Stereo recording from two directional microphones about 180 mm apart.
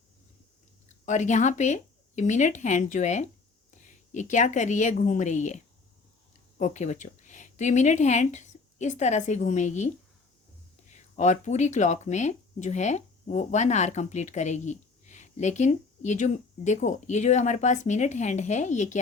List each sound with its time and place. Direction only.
1.0 s a woman's voice: 40° left (ahead or behind)
6.6 s speech: 40° left (ahead or behind)